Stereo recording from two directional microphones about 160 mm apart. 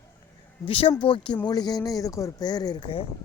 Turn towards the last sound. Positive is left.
turn(degrees=35)  # may be behind; listen again after turning